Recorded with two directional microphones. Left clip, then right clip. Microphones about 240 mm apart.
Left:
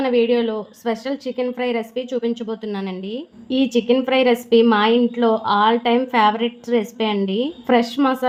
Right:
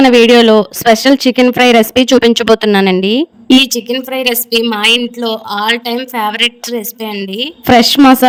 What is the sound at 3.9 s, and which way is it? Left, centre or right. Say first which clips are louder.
A woman's voice: right 1 dB; centre.